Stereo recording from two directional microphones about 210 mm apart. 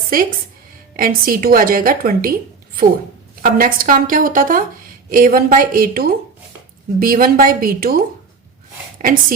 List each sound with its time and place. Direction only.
0.1 s a woman's voice: 40° right (ahead or behind)
3.4 s a woman's voice: 40° right (ahead or behind)